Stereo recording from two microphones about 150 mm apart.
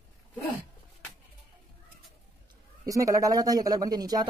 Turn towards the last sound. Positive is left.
turn(degrees=-25)  # may be behind; listen again after turning